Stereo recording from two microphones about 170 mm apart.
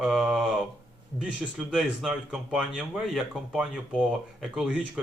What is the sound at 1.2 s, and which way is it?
Speech, 5° right (ahead or behind).